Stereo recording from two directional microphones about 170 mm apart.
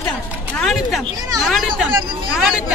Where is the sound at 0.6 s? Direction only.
Centre (ahead or behind).